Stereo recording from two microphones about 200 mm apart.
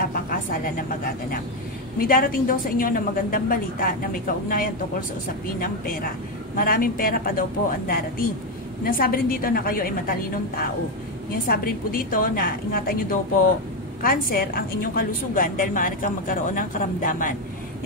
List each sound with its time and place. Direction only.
0.0 s a woman's voice: 45° left (ahead or behind)
8.8 s a woman's voice: 45° left (ahead or behind)